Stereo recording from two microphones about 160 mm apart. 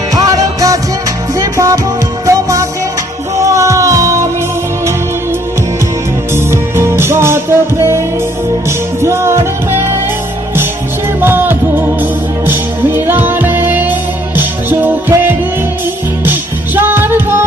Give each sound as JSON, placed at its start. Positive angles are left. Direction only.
{"t": 0.1, "sound": "music", "side_deg": -20}
{"t": 6.3, "sound": "music", "side_deg": -15}
{"t": 11.2, "sound": "music", "side_deg": -15}
{"t": 16.7, "sound": "music", "side_deg": -15}